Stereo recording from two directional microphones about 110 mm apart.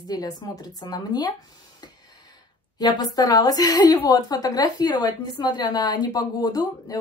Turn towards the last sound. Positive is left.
turn(degrees=35)  # may be behind; listen again after turning